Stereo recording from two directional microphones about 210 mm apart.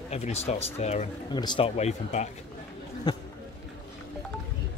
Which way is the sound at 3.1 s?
20° left (ahead or behind).